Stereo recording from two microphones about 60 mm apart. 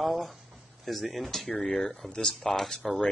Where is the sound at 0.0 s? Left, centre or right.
Centre.